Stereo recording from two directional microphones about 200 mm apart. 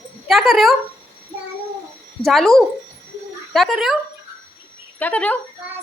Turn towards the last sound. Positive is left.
turn(degrees=10)  # may be behind; listen again after turning